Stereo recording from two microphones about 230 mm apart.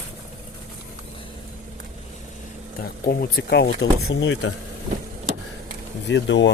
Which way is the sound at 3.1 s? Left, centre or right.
Left.